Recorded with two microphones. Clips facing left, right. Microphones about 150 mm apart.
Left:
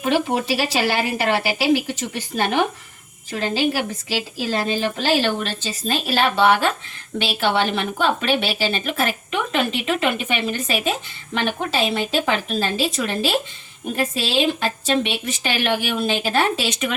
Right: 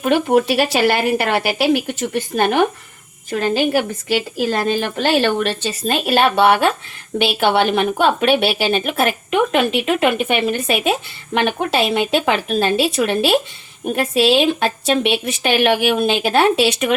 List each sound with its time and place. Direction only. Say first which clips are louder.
0.0 s a woman's voice: right 5 dB; 55° right (ahead or behind)